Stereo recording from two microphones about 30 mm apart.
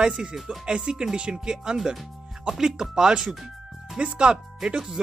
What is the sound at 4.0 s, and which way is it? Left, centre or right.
Speech, right.